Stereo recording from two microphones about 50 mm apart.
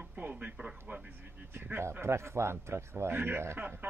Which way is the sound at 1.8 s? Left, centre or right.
Right.